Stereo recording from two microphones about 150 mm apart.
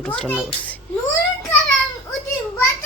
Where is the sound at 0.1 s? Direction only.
10° left (ahead or behind).